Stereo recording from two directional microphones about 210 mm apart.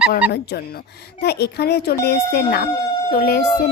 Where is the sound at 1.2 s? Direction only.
50° left (ahead or behind).